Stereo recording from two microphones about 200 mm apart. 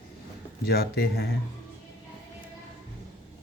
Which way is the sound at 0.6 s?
50° left (ahead or behind).